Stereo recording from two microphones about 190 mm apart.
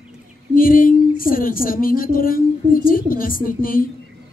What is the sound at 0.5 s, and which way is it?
A man's voice, 45° left (ahead or behind).